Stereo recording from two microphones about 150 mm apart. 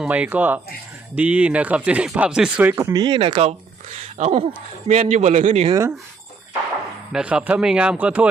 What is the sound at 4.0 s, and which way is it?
A man's voice, 50° right (ahead or behind).